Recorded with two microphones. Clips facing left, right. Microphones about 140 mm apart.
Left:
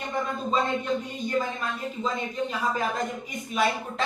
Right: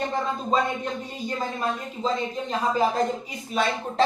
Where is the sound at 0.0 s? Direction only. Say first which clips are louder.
Right 2 dB; 35° right (ahead or behind).